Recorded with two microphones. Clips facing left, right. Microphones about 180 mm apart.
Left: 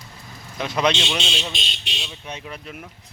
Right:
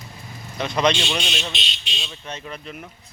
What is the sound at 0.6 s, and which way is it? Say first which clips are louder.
Speech: right 1 dB; 5° left (ahead or behind).